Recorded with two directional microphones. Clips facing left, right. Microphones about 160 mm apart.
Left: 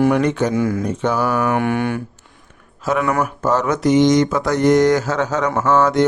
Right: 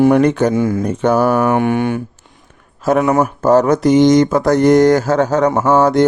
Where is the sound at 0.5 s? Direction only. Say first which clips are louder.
Right 3 dB; 25° right (ahead or behind).